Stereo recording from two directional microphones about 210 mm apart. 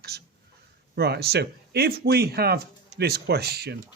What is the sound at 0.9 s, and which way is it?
Speech, 50° right (ahead or behind).